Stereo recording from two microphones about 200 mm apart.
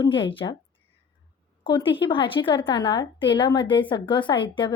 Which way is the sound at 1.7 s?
25° left (ahead or behind).